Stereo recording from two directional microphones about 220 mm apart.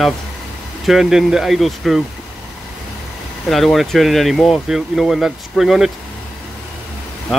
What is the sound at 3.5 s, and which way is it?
Speech, centre (ahead or behind).